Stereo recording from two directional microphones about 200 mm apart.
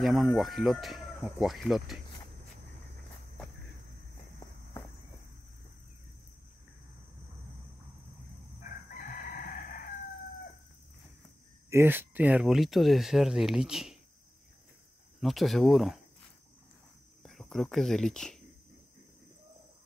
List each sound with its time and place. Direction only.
0.0 s speech: centre (ahead or behind)
9.0 s chicken: 45° left (ahead or behind)
11.7 s speech: 10° right (ahead or behind)
15.1 s speech: centre (ahead or behind)
17.2 s speech: centre (ahead or behind)